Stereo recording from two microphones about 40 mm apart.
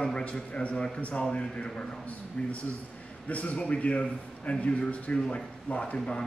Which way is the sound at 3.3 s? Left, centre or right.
Left.